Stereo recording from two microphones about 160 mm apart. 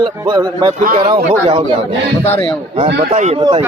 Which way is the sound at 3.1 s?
45° right (ahead or behind).